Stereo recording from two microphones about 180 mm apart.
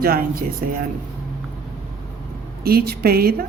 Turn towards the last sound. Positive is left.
turn(degrees=-55)  # may be behind; listen again after turning